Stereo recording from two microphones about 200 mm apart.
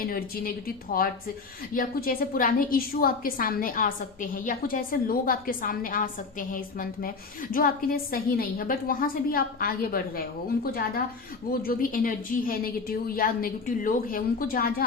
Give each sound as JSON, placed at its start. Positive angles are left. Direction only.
{"t": 0.0, "sound": "a woman's voice", "side_deg": 45}